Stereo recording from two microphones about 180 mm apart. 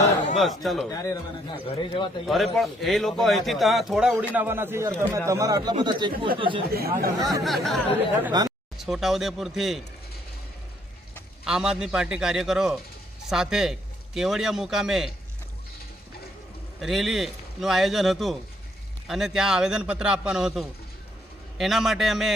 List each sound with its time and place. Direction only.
0.3 s a man's voice: centre (ahead or behind)
0.9 s speech: 20° left (ahead or behind)
1.5 s speech: 30° left (ahead or behind)
2.2 s a man's voice: centre (ahead or behind)
4.4 s speech: 15° right (ahead or behind); by 6.6 s 30° right (ahead or behind)
6.7 s speech: 60° right (ahead or behind)
7.4 s a man's voice: centre (ahead or behind)
8.3 s speech: 20° right (ahead or behind)
8.8 s a man's voice: centre (ahead or behind)
11.4 s a man's voice: 5° right (ahead or behind)
16.8 s a man's voice: centre (ahead or behind)